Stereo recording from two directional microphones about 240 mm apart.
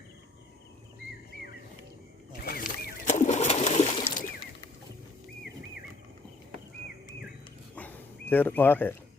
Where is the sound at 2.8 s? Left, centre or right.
Left.